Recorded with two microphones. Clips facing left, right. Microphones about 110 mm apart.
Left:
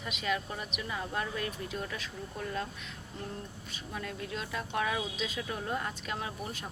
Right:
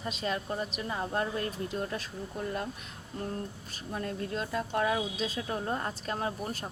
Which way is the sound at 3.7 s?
40° right (ahead or behind).